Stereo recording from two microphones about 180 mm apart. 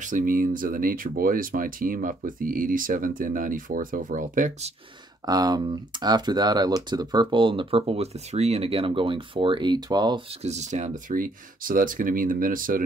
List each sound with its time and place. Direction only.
0.0 s speech: 45° right (ahead or behind)
5.2 s speech: 20° right (ahead or behind)
10.4 s speech: 40° right (ahead or behind)